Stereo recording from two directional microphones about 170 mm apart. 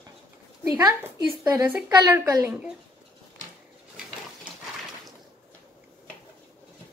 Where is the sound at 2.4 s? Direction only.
10° right (ahead or behind).